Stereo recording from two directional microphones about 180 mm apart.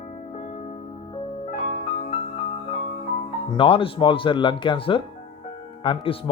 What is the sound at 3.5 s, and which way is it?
Speech, 30° left (ahead or behind).